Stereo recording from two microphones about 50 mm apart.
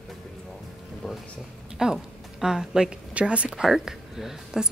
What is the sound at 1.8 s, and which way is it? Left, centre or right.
Speech, centre.